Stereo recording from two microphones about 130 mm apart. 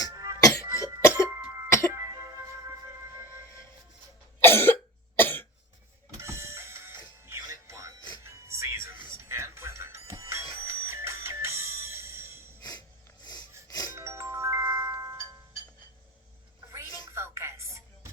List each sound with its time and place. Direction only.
0.1 s music: 30° right (ahead or behind)
0.3 s music: 25° left (ahead or behind)
1.0 s cough: 20° left (ahead or behind)
1.3 s cough: 20° right (ahead or behind)
1.9 s music: 20° right (ahead or behind)
4.4 s cough: 15° left (ahead or behind)
6.1 s printer: 20° right (ahead or behind)
7.3 s music: 25° right (ahead or behind)
13.7 s music: 30° left (ahead or behind)
13.9 s music: 20° right (ahead or behind)
17.1 s music: 20° right (ahead or behind)